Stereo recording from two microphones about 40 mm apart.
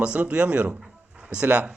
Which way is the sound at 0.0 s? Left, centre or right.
Right.